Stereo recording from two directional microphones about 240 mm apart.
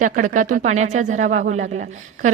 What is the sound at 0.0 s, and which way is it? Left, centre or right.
Speech, right.